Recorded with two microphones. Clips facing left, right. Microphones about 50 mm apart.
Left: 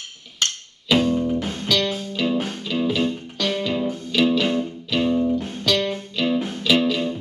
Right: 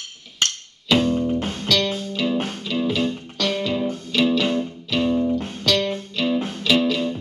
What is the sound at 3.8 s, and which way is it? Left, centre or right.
Music, left.